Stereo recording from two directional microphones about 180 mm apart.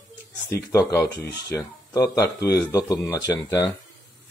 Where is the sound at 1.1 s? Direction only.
70° left (ahead or behind).